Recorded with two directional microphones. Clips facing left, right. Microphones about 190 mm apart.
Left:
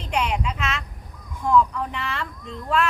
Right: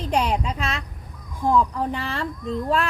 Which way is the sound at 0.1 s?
35° right (ahead or behind).